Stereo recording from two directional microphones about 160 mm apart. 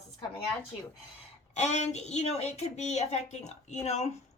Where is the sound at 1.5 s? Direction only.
45° left (ahead or behind).